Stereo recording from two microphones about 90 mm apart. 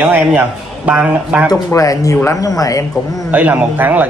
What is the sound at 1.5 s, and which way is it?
Speech, 40° left (ahead or behind).